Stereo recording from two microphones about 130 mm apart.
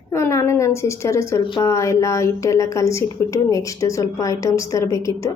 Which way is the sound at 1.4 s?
40° left (ahead or behind).